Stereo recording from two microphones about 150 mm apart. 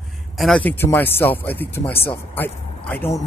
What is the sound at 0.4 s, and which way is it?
Speech, 5° left (ahead or behind).